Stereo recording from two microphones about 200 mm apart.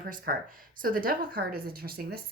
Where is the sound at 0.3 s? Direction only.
45° right (ahead or behind).